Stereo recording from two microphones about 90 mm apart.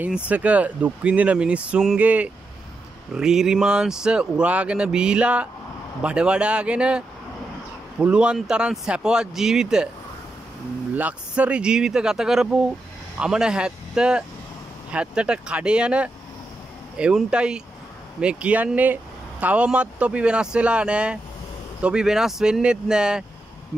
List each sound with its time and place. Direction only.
0.0 s speech: 15° right (ahead or behind)
11.0 s speech: 15° right (ahead or behind)